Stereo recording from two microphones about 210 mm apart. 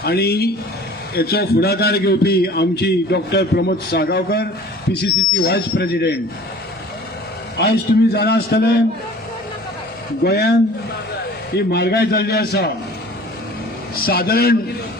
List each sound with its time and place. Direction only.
0.0 s a man's voice: 50° left (ahead or behind)
7.6 s a man's voice: 55° left (ahead or behind)
10.2 s a man's voice: 50° left (ahead or behind)
13.9 s a man's voice: 45° left (ahead or behind)